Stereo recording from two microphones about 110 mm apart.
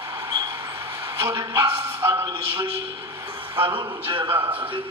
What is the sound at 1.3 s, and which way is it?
Speech, 25° right (ahead or behind).